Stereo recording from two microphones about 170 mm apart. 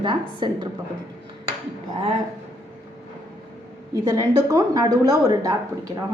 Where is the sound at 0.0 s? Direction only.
30° right (ahead or behind).